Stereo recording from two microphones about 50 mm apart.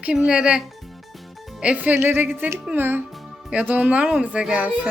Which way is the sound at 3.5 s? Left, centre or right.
Right.